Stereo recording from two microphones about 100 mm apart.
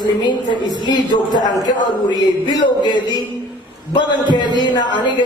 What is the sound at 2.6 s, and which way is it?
Speech, 45° left (ahead or behind).